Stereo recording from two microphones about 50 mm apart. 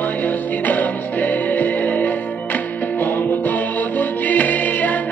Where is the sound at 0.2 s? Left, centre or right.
Left.